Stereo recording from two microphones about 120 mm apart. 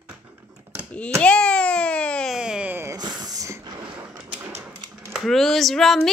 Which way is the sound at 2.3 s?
5° right (ahead or behind).